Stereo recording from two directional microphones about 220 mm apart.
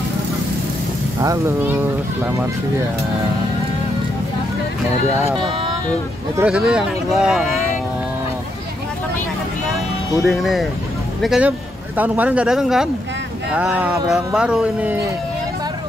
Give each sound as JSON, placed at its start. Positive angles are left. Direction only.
{"t": 1.2, "sound": "a child's voice", "side_deg": -15}
{"t": 5.4, "sound": "a sound", "side_deg": -20}
{"t": 6.3, "sound": "speech", "side_deg": -5}
{"t": 10.2, "sound": "speech", "side_deg": 0}